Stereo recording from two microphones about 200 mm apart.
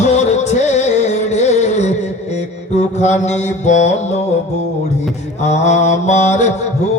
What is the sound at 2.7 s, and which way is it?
Mantra, 35° left (ahead or behind).